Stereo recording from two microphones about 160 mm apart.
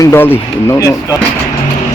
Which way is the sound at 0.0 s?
15° left (ahead or behind).